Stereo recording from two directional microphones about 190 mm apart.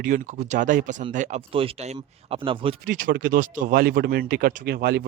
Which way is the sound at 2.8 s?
45° right (ahead or behind).